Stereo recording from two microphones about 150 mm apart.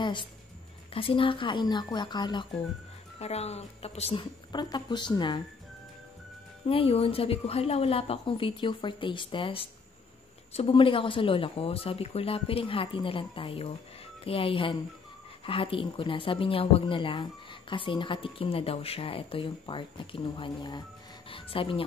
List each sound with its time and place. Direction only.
0.0 s speech: 30° left (ahead or behind)
3.2 s speech: 45° left (ahead or behind)
6.7 s speech: 40° left (ahead or behind)